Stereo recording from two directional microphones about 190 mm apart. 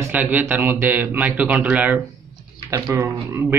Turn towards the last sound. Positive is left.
turn(degrees=-10)  # may be behind; listen again after turning